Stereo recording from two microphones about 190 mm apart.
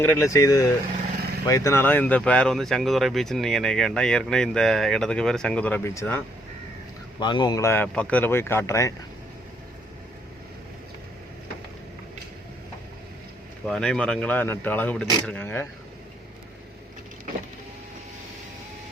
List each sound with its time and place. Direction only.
0.0 s speech: 15° left (ahead or behind)
7.2 s speech: 25° left (ahead or behind)
13.7 s speech: 5° left (ahead or behind)